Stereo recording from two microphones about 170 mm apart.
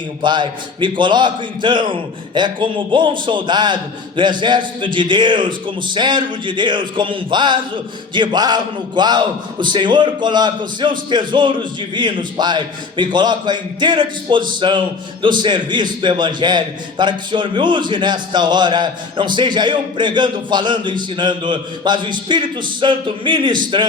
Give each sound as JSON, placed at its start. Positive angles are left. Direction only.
{"t": 0.2, "sound": "a man's voice", "side_deg": -25}